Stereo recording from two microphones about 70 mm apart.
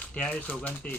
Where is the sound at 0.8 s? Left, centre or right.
Centre.